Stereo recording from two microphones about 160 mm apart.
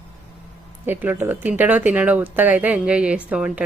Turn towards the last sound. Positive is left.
turn(degrees=-5)  # may be behind; listen again after turning